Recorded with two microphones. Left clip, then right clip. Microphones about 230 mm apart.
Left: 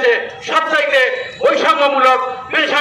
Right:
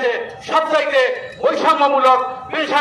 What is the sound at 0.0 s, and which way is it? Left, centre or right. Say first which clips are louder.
A man's voice: left 5 dB; right.